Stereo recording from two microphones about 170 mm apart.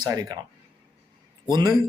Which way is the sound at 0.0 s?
20° right (ahead or behind).